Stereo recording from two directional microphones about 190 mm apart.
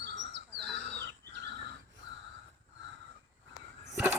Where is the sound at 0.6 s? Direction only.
5° left (ahead or behind).